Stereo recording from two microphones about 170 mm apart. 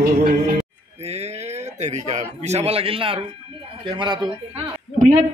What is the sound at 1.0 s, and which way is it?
Speech, 40° right (ahead or behind).